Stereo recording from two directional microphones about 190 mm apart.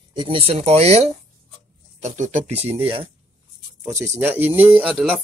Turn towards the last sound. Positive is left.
turn(degrees=-5)  # may be behind; listen again after turning